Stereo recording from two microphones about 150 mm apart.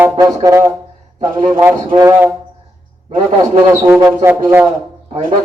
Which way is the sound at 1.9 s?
25° right (ahead or behind).